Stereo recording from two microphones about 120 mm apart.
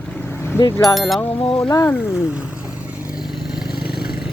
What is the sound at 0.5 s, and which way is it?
Speech, 20° left (ahead or behind).